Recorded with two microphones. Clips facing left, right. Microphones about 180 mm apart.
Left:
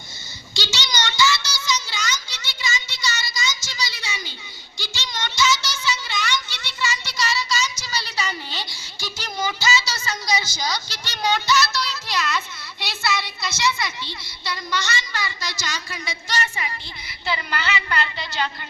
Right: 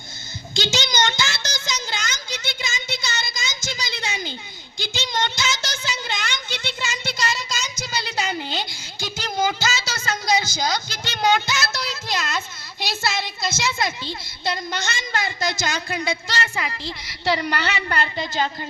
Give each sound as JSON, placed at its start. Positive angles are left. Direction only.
{"t": 0.5, "sound": "a sound", "side_deg": -50}
{"t": 12.8, "sound": "a woman's voice", "side_deg": -45}
{"t": 16.6, "sound": "a woman's voice", "side_deg": -70}
{"t": 17.8, "sound": "a woman's voice", "side_deg": -45}